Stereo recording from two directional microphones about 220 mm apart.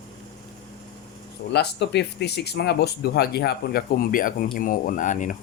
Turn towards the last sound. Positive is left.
turn(degrees=35)  # may be behind; listen again after turning